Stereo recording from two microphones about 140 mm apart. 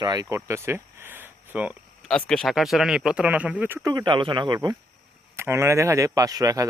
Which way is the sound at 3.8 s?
25° right (ahead or behind).